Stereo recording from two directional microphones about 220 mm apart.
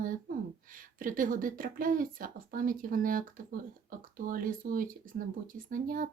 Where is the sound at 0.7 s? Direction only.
40° right (ahead or behind).